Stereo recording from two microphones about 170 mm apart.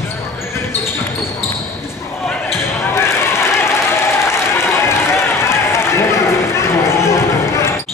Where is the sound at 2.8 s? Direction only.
15° left (ahead or behind).